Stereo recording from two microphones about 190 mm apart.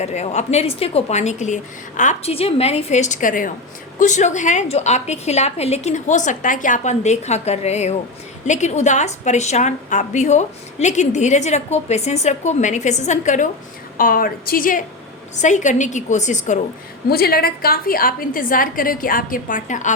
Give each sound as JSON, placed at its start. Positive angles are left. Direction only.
{"t": 0.0, "sound": "a woman's voice", "side_deg": 35}
{"t": 17.1, "sound": "a woman's voice", "side_deg": 55}